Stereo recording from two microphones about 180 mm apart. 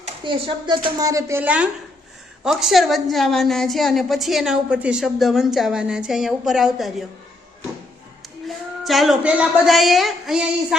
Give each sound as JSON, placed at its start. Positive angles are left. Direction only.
{"t": 0.3, "sound": "a woman's voice", "side_deg": -30}
{"t": 8.4, "sound": "a woman's voice", "side_deg": 0}